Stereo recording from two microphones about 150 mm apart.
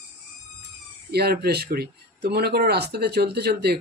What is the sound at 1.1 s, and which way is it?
Speech, 90° right.